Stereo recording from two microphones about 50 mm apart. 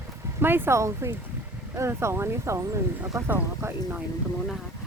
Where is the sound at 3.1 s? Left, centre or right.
Right.